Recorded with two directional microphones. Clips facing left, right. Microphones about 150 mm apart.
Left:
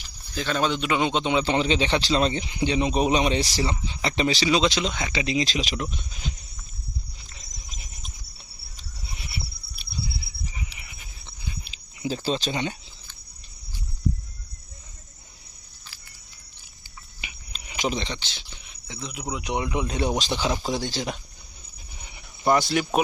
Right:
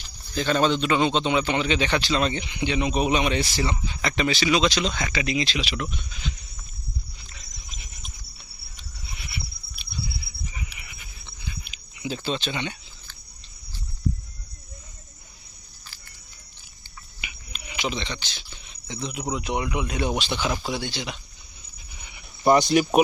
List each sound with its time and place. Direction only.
0.3 s a man's voice: centre (ahead or behind); by 1.5 s 20° left (ahead or behind)
1.5 s a man's voice: 30° left (ahead or behind)
7.3 s a sound: 40° left (ahead or behind)
8.7 s insect: 35° left (ahead or behind)
9.7 s a sound: 30° left (ahead or behind)
17.2 s a sound: 35° left (ahead or behind)
18.9 s speech: centre (ahead or behind)
19.4 s a man's voice: 20° left (ahead or behind); by 21.2 s 40° left (ahead or behind)
22.4 s speech: 20° right (ahead or behind)